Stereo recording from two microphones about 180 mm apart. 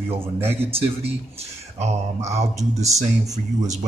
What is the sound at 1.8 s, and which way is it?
Speech, 40° right (ahead or behind).